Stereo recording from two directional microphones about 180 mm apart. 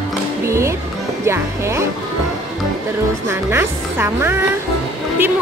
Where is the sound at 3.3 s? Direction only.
15° right (ahead or behind).